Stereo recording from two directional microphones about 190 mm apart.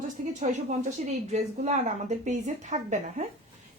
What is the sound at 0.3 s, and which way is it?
A woman's voice, 35° right (ahead or behind).